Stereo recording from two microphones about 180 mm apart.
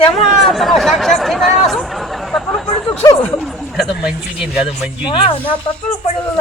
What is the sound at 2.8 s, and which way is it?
Speech, 20° left (ahead or behind).